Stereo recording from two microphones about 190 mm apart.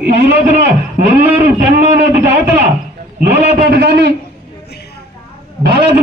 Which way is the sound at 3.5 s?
55° right (ahead or behind).